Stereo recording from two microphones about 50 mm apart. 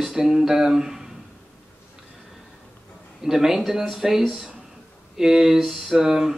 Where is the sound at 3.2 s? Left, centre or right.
Centre.